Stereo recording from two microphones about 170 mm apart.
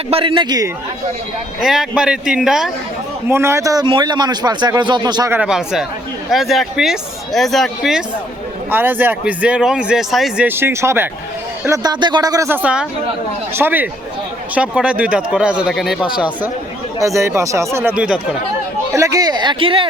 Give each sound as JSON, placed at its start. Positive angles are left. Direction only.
{"t": 0.1, "sound": "a man's voice", "side_deg": -30}
{"t": 1.6, "sound": "speech", "side_deg": -5}
{"t": 3.2, "sound": "a man's voice", "side_deg": -15}
{"t": 5.3, "sound": "speech", "side_deg": -5}
{"t": 8.7, "sound": "a man's voice", "side_deg": -10}
{"t": 12.6, "sound": "speech", "side_deg": -5}
{"t": 17.0, "sound": "speech", "side_deg": -20}
{"t": 18.9, "sound": "speech", "side_deg": -20}